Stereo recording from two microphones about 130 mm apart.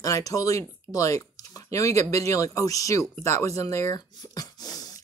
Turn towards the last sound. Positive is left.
turn(degrees=30)  # may be behind; listen again after turning